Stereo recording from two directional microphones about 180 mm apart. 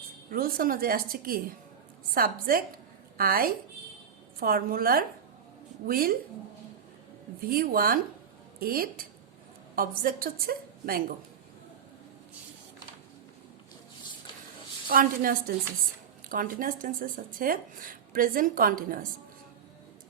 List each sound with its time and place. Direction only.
0.3 s a woman's voice: 55° right (ahead or behind)
7.4 s a woman's voice: 55° right (ahead or behind)
14.8 s a woman's voice: 55° right (ahead or behind)